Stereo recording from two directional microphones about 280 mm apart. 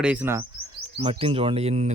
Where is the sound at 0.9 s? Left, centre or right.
Centre.